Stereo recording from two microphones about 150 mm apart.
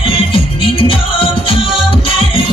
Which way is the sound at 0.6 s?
35° left (ahead or behind).